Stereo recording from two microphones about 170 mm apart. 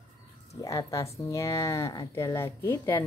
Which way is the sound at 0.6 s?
20° left (ahead or behind).